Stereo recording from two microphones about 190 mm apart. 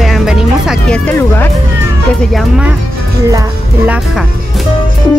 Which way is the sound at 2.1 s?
Centre (ahead or behind).